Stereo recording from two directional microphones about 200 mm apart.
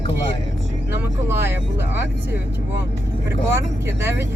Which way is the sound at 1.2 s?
10° right (ahead or behind).